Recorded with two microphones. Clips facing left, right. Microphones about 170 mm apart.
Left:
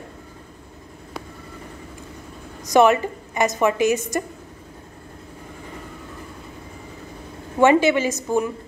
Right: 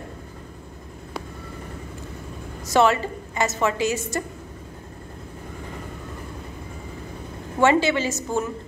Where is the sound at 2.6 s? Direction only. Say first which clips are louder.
Left 3 dB; 15° left (ahead or behind).